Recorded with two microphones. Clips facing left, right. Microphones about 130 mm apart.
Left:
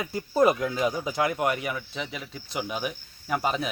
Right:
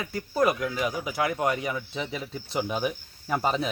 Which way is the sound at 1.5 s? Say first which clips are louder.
Right 1 dB; 25° right (ahead or behind).